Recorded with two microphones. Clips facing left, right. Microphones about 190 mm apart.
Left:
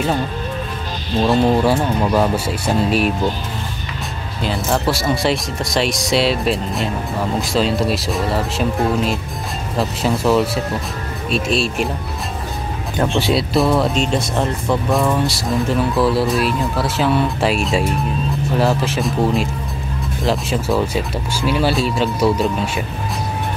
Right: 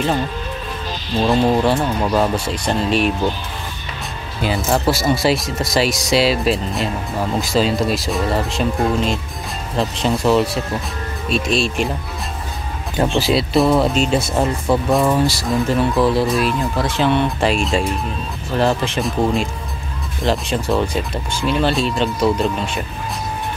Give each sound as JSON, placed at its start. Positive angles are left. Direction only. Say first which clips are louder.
{"t": 1.3, "sound": "speech", "louder": "left 1 dB", "side_deg": 5}
{"t": 4.4, "sound": "speech", "louder": "right 1 dB", "side_deg": -5}
{"t": 12.9, "sound": "speech", "louder": "right 1 dB", "side_deg": -5}